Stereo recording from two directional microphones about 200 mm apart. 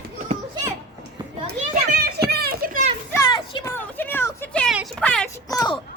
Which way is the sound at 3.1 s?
20° left (ahead or behind).